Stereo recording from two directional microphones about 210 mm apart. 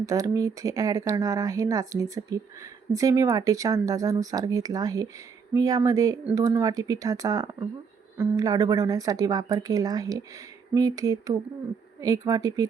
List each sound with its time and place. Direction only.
0.0 s speech: 15° right (ahead or behind)